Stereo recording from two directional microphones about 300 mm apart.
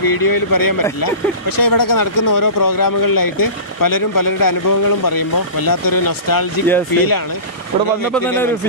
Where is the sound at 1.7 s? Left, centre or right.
Left.